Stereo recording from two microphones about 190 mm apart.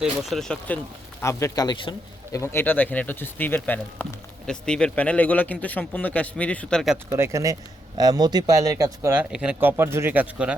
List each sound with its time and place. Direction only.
0.0 s speech: centre (ahead or behind)
1.2 s a man's voice: 15° left (ahead or behind)
7.1 s speech: 15° right (ahead or behind)